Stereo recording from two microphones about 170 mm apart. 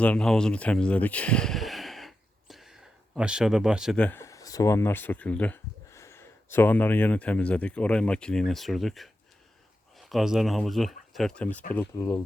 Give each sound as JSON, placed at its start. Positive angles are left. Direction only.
{"t": 0.0, "sound": "speech", "side_deg": 5}
{"t": 3.9, "sound": "speech", "side_deg": 10}